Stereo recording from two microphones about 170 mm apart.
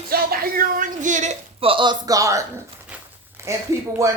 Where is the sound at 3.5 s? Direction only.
15° right (ahead or behind).